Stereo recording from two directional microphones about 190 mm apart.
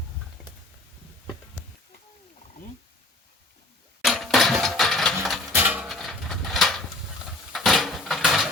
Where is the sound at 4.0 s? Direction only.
Centre (ahead or behind).